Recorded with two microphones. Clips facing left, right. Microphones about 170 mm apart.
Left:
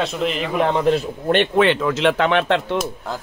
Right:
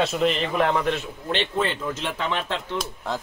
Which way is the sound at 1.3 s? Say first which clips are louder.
Left 9 dB; 60° left (ahead or behind).